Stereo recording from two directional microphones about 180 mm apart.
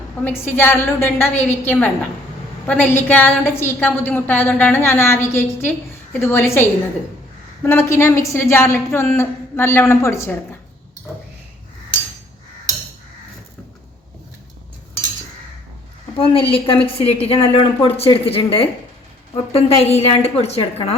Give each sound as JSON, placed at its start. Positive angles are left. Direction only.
{"t": 0.3, "sound": "a woman's voice", "side_deg": 10}
{"t": 16.1, "sound": "a woman's voice", "side_deg": 30}